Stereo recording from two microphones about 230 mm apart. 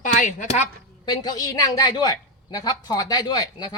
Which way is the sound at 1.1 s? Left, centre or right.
Centre.